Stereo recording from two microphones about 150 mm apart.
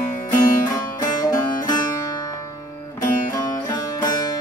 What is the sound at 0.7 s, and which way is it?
Music, 25° left (ahead or behind).